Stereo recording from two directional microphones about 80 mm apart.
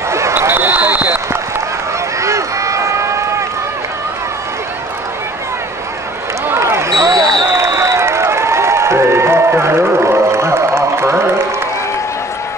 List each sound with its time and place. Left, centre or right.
0.1 s basketball bounce: right
2.1 s run: right
6.4 s basketball bounce: right